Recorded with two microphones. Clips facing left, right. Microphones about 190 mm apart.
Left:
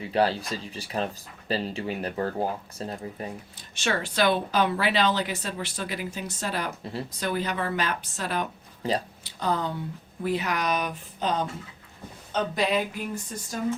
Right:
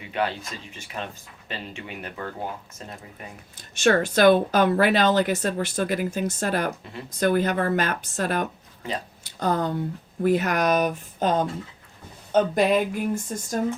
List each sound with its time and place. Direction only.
0.0 s speech: 35° left (ahead or behind)
3.8 s a woman's voice: 50° right (ahead or behind)
8.8 s speech: 35° left (ahead or behind)
9.2 s a woman's voice: 45° right (ahead or behind)